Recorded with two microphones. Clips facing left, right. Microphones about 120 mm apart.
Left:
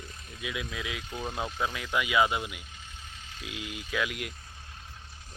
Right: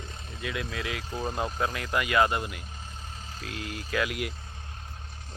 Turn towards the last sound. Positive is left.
turn(degrees=0)  # may be behind; listen again after turning